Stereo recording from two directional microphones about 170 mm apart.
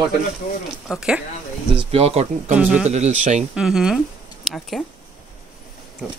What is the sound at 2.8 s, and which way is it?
Speech, 40° right (ahead or behind).